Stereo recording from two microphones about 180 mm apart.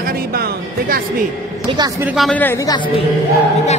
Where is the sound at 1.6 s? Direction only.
25° right (ahead or behind).